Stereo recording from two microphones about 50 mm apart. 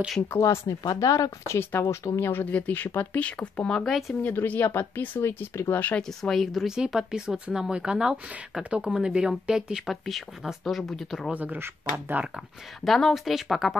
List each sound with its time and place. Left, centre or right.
0.4 s speech: left
1.6 s speech: left
2.5 s speech: left
3.3 s speech: left
4.2 s speech: left
5.2 s speech: left
5.7 s speech: left
5.9 s speech: centre
6.7 s speech: centre
9.8 s speech: centre
11.3 s speech: right
12.8 s speech: centre